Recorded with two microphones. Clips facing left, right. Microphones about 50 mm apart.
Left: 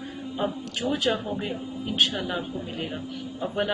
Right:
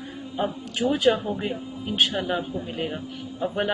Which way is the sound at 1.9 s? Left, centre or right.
Right.